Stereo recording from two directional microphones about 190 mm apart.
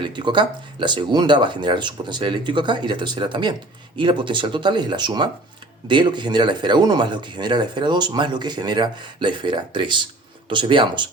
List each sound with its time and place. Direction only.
0.0 s speech: 25° right (ahead or behind)